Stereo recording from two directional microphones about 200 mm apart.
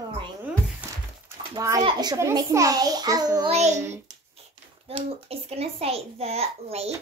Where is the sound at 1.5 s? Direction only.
20° right (ahead or behind).